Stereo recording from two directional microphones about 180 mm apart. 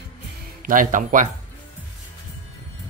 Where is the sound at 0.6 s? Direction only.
45° right (ahead or behind).